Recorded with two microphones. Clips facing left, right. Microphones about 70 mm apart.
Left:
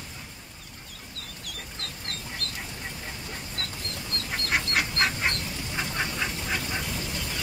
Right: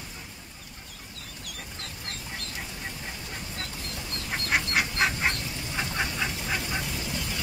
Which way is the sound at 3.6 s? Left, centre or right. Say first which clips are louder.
Left 2 dB; centre.